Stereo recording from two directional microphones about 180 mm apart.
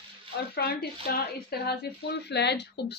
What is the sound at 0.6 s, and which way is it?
Speech, 60° left (ahead or behind).